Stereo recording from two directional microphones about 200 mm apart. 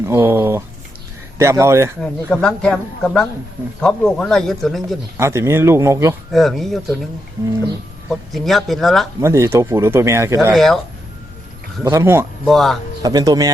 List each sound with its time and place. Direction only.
0.0 s speech: 15° right (ahead or behind)
2.0 s speech: 5° left (ahead or behind)
5.1 s speech: 15° right (ahead or behind)
6.3 s speech: centre (ahead or behind)
8.1 s speech: centre (ahead or behind)
9.2 s speech: 15° right (ahead or behind)
10.5 s speech: centre (ahead or behind)
11.8 s speech: 15° right (ahead or behind)
12.5 s speech: centre (ahead or behind)
13.0 s speech: 20° right (ahead or behind)